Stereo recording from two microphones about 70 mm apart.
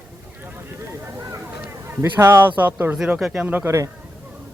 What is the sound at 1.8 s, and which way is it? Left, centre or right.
Speech, right.